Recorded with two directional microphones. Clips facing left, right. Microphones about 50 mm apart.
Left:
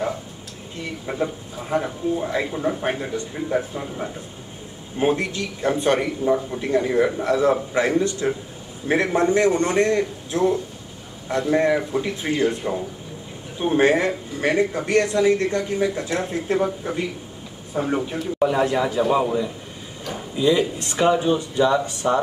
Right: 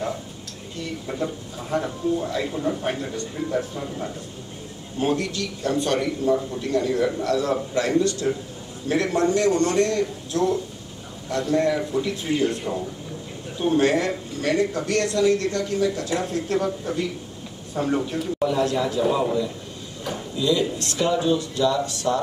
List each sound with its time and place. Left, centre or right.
1.0 s speech: left